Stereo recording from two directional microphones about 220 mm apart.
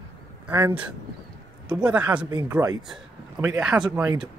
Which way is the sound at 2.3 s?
15° right (ahead or behind).